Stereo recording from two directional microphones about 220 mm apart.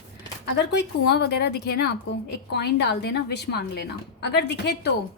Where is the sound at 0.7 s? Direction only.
50° left (ahead or behind).